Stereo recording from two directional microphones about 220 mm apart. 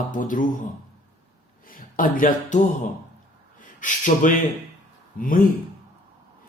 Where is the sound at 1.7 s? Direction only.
40° left (ahead or behind).